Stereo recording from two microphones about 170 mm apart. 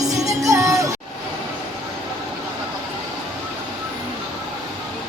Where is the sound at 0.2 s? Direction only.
20° right (ahead or behind).